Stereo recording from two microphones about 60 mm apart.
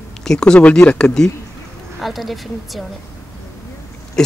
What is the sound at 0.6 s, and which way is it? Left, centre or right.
Speech, left.